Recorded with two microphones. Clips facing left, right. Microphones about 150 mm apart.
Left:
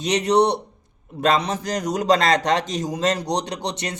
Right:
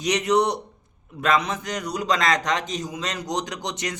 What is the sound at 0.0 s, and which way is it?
A man's voice, 30° left (ahead or behind).